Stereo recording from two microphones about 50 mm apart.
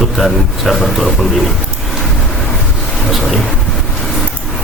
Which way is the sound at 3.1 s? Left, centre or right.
Centre.